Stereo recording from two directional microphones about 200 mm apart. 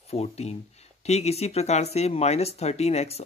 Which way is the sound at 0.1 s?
30° left (ahead or behind).